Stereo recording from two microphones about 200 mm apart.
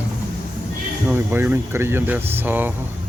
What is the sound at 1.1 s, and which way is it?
Speech, 10° right (ahead or behind).